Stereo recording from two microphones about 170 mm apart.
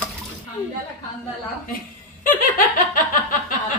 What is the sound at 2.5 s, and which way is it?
Laughter, 55° left (ahead or behind).